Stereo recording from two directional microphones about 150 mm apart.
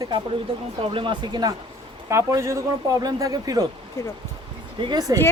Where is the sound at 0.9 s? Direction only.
30° right (ahead or behind).